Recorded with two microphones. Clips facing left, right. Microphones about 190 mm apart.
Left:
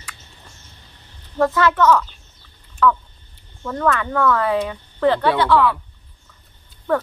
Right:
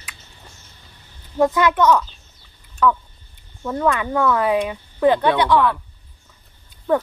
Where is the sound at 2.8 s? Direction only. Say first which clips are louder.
Left 1 dB; 15° right (ahead or behind).